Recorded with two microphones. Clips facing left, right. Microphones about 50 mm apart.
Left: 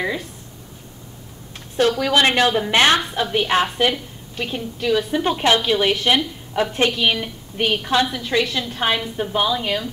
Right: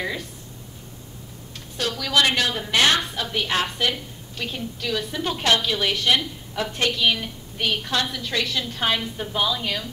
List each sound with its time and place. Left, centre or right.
1.8 s a woman's voice: left